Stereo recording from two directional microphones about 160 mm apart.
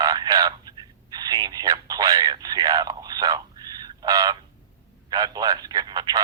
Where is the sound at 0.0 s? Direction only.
25° right (ahead or behind).